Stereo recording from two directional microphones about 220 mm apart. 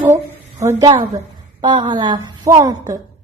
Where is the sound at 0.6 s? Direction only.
15° right (ahead or behind).